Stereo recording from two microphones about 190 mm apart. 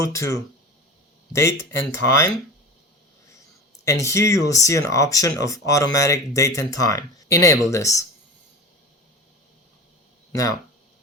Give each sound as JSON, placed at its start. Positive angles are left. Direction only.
{"t": 0.0, "sound": "speech", "side_deg": 15}
{"t": 3.8, "sound": "speech", "side_deg": 15}